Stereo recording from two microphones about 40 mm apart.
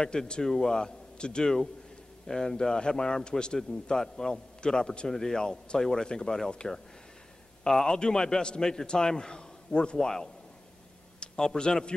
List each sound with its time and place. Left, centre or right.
0.0 s speech: left
0.4 s a man's voice: centre
7.6 s a man's voice: centre